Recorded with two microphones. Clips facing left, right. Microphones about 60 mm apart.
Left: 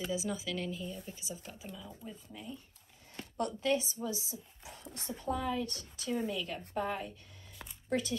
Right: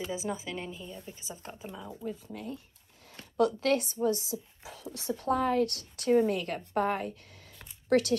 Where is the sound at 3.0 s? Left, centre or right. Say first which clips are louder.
Right 9 dB; right.